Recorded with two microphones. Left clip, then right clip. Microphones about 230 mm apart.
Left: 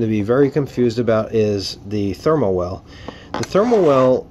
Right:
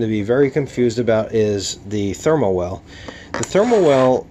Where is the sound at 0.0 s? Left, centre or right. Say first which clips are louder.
Even; centre.